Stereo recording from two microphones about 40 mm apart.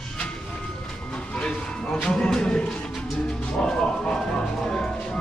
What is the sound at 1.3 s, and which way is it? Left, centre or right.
Speech, left.